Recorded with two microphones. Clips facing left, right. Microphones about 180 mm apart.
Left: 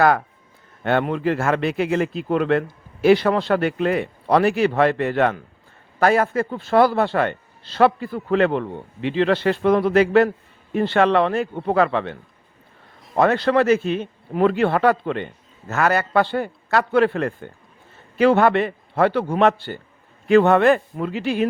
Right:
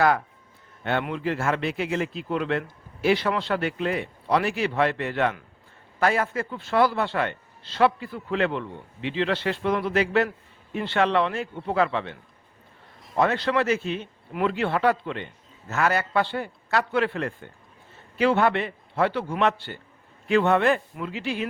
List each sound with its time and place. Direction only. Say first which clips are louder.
1.1 s a man's voice: left 5 dB; 50° left (ahead or behind)
13.1 s a man's voice: left 6 dB; 50° left (ahead or behind)